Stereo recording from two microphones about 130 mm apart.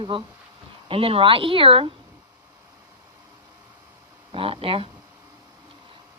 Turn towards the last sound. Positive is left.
turn(degrees=-45)  # may be behind; listen again after turning